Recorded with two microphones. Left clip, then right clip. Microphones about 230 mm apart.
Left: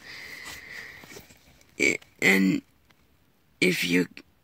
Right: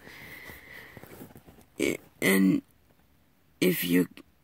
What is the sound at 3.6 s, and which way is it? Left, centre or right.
Speech, centre.